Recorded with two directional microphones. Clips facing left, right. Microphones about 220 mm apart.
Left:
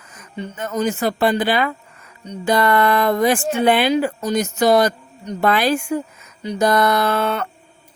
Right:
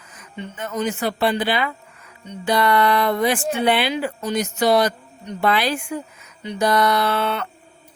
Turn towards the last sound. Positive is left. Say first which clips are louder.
# left 2 dB
turn(degrees=45)  # may be behind; listen again after turning